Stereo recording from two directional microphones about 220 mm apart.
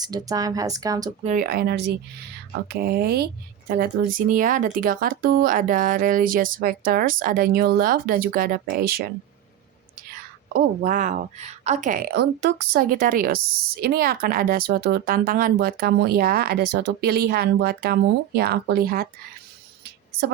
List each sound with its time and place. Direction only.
0.0 s speech: 15° right (ahead or behind)
1.2 s a woman's voice: 35° right (ahead or behind)
4.3 s speech: 35° right (ahead or behind)
10.5 s a woman's voice: 40° right (ahead or behind)
19.8 s a sound: 45° right (ahead or behind)